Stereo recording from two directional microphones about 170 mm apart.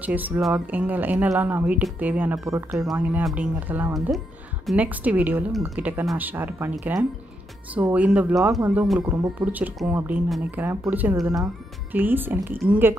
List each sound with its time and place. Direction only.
0.0 s speech: 10° right (ahead or behind)
9.0 s speech: 20° right (ahead or behind)
9.4 s speech: 10° right (ahead or behind)